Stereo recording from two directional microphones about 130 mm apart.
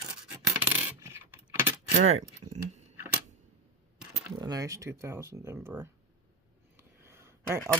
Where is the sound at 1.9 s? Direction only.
60° right (ahead or behind).